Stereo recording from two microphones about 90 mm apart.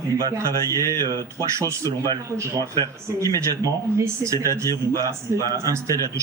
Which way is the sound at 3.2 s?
40° right (ahead or behind).